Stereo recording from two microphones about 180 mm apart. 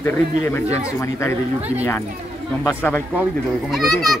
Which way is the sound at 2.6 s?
10° left (ahead or behind).